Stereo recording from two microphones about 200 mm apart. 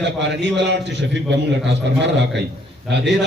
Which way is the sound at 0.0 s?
60° right (ahead or behind).